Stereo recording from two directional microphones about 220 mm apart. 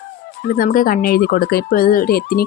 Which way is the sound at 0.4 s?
40° left (ahead or behind).